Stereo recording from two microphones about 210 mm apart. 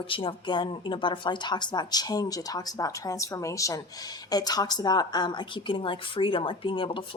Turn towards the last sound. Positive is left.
turn(degrees=25)  # may be behind; listen again after turning